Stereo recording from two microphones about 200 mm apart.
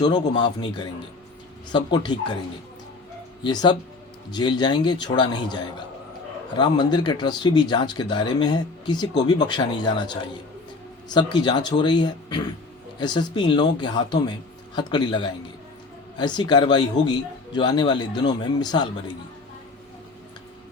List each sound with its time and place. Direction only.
0.0 s speech: 20° left (ahead or behind)
3.4 s speech: 20° left (ahead or behind)